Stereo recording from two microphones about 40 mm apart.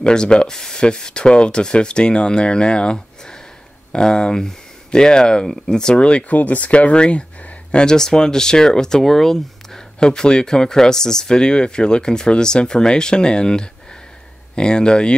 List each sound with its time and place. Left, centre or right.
0.0 s speech: left
6.3 s speech: left
7.8 s speech: centre